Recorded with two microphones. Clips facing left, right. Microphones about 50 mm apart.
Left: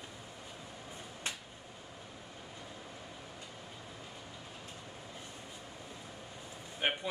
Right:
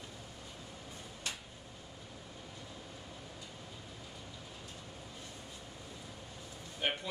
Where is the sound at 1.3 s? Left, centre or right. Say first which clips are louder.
Left 2 dB; left.